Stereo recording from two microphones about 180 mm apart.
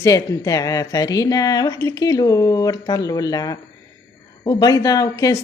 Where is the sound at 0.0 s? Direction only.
20° left (ahead or behind).